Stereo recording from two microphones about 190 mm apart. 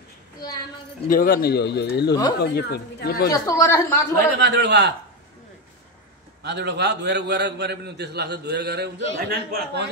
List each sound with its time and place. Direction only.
1.0 s speech: 50° left (ahead or behind)
3.3 s speech: 20° left (ahead or behind)
4.4 s a man's voice: 65° right (ahead or behind)
6.4 s a man's voice: 65° right (ahead or behind)